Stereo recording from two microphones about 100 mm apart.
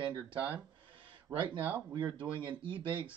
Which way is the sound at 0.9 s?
60° right (ahead or behind).